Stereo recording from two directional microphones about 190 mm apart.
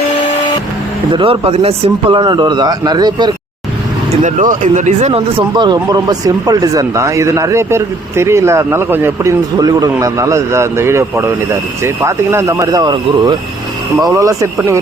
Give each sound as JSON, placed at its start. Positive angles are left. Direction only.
{"t": 1.1, "sound": "speech", "side_deg": -30}
{"t": 4.1, "sound": "speech", "side_deg": -40}
{"t": 5.4, "sound": "speech", "side_deg": -25}